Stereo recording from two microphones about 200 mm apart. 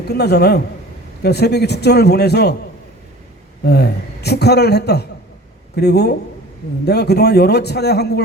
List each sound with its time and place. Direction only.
0.1 s a man's voice: 55° left (ahead or behind)
3.7 s a man's voice: 55° left (ahead or behind)